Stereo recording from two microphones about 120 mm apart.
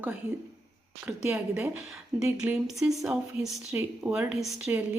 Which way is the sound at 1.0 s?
10° right (ahead or behind).